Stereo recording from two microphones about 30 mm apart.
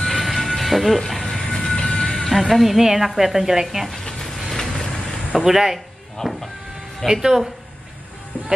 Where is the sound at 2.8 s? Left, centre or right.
Centre.